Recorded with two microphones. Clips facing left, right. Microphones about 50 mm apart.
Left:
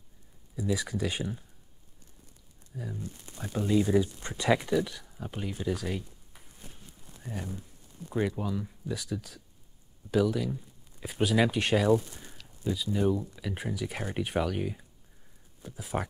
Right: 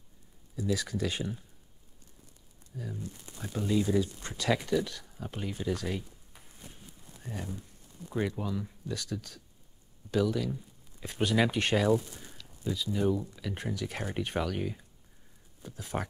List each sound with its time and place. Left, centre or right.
0.6 s speech: centre
2.7 s speech: centre
3.8 s speech: left
4.6 s speech: centre
7.4 s speech: centre